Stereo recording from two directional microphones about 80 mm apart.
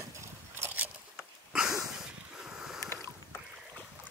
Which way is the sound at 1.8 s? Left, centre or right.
Centre.